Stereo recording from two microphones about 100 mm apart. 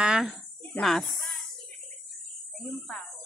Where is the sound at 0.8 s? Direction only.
5° left (ahead or behind).